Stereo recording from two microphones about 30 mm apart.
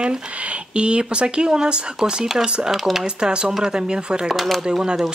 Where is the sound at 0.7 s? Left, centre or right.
Right.